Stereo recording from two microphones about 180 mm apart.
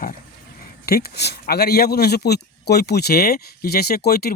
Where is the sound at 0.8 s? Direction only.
60° left (ahead or behind).